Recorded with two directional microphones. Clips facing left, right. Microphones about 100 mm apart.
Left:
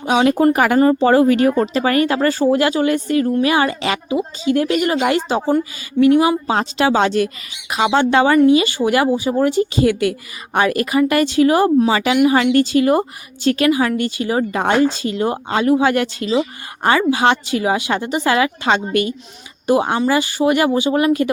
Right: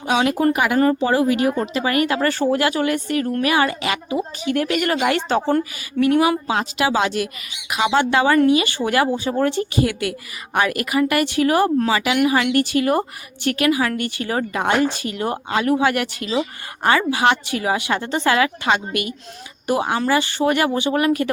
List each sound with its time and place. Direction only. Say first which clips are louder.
0.0 s a woman's voice: left 4 dB; 25° left (ahead or behind)
18.3 s a woman's voice: left 2 dB; 25° left (ahead or behind)